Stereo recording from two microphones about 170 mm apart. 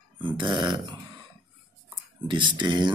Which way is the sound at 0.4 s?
25° right (ahead or behind).